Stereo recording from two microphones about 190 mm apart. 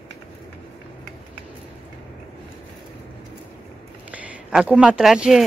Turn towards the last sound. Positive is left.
turn(degrees=0)  # may be behind; listen again after turning